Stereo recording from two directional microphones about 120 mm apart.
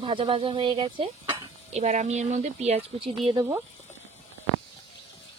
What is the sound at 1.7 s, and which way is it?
Speech, 70° right (ahead or behind).